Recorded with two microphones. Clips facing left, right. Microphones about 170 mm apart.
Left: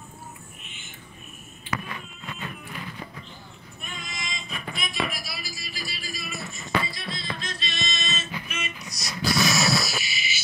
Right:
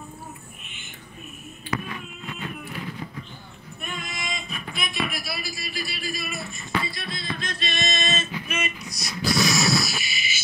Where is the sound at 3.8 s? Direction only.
60° right (ahead or behind).